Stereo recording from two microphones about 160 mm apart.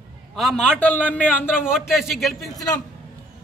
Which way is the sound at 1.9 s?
Centre (ahead or behind).